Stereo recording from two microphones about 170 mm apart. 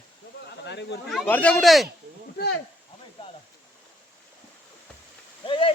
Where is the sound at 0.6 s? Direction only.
90° left.